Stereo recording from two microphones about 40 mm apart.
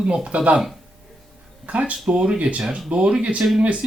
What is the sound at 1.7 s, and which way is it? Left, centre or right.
Speech, right.